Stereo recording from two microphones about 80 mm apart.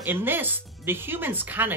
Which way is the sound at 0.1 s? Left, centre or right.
Right.